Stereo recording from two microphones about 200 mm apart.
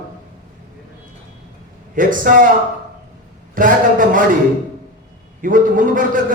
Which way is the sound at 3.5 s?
40° right (ahead or behind).